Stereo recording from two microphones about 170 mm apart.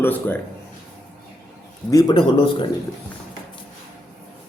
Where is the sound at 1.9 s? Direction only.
25° left (ahead or behind).